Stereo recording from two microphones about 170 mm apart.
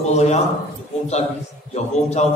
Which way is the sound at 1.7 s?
40° left (ahead or behind).